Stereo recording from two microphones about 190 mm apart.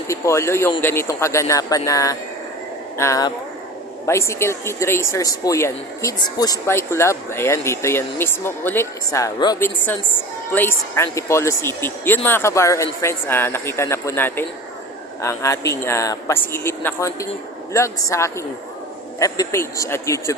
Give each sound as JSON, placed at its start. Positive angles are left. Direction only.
{"t": 0.1, "sound": "speech", "side_deg": 15}